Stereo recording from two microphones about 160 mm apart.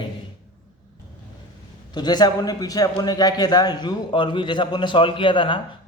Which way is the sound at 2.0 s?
25° left (ahead or behind).